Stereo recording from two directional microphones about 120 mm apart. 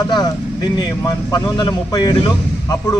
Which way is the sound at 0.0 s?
30° left (ahead or behind).